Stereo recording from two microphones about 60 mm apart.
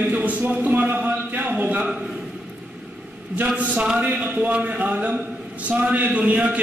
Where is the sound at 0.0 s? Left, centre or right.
Right.